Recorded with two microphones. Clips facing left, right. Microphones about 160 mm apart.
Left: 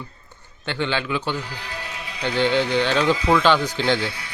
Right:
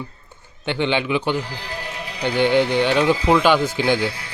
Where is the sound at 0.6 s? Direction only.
20° right (ahead or behind).